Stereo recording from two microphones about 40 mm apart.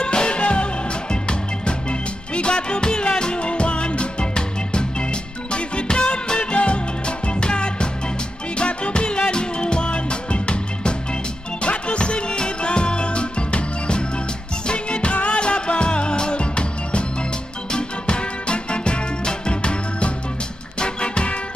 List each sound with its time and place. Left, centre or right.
0.0 s music: left